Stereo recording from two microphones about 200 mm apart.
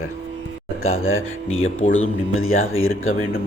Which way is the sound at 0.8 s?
90° left.